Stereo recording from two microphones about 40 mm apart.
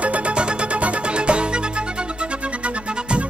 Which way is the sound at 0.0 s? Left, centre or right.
Right.